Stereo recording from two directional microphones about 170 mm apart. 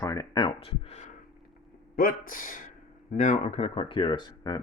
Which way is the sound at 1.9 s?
55° left (ahead or behind).